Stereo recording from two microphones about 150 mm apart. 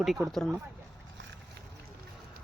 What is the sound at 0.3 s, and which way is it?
Speech, centre (ahead or behind).